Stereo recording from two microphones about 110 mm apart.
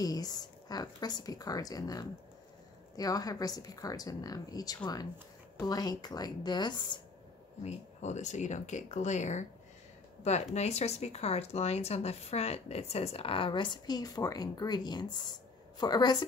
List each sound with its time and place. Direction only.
0.0 s a woman's voice: 35° left (ahead or behind)
7.6 s speech: 90° left
10.5 s a woman's voice: 80° left; by 16.3 s 40° left (ahead or behind)